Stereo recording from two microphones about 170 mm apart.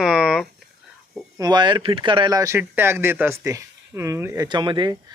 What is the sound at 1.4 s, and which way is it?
Speech, 25° right (ahead or behind).